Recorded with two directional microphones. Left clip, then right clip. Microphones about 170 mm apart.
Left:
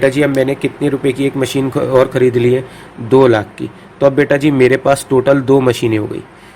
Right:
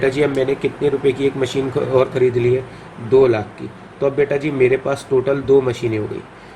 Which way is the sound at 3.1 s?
80° left.